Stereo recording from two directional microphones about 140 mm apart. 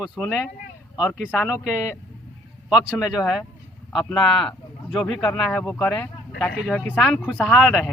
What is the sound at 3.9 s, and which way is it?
Speech, centre (ahead or behind).